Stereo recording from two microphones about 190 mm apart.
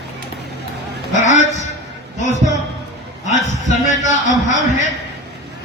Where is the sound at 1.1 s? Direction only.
40° left (ahead or behind).